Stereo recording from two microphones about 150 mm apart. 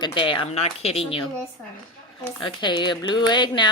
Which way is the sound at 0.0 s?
35° left (ahead or behind).